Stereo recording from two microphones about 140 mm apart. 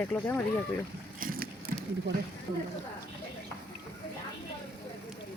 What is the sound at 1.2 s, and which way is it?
Boat, 85° right.